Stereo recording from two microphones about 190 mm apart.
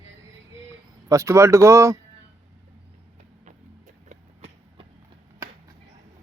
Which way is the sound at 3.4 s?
40° right (ahead or behind).